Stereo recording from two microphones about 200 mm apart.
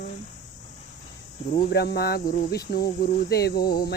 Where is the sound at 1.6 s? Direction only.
50° left (ahead or behind).